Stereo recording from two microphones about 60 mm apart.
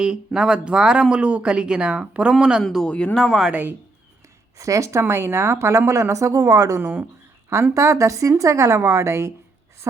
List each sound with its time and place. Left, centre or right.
0.3 s speech: centre
2.8 s speech: left
3.2 s speech: centre
3.5 s speech: right
4.5 s speech: right
7.5 s speech: right